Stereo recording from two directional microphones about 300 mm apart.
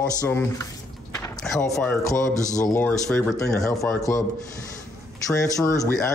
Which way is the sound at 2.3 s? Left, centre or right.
Left.